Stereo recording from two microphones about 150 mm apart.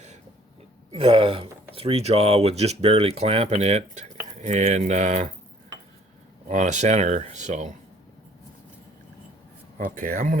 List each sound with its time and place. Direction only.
0.9 s speech: 40° right (ahead or behind)
6.5 s speech: 55° right (ahead or behind)
9.7 s speech: 65° right (ahead or behind)